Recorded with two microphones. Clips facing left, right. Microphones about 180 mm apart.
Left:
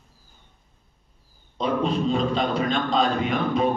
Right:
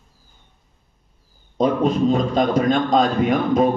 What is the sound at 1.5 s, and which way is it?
A man's voice, 45° right (ahead or behind).